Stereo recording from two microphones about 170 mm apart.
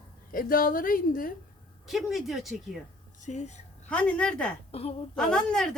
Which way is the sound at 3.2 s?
40° left (ahead or behind).